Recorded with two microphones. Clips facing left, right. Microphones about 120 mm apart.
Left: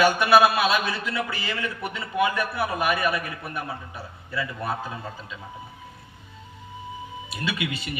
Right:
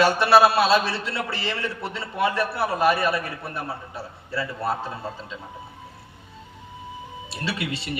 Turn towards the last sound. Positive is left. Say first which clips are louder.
# even
turn(degrees=-35)  # may be behind; listen again after turning